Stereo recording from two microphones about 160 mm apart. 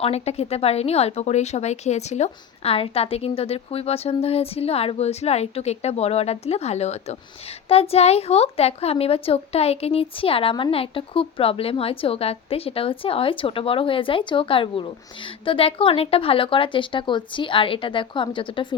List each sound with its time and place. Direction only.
0.0 s a woman's voice: 40° left (ahead or behind)